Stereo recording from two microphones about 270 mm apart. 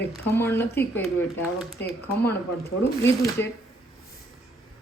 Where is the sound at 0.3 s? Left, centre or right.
Centre.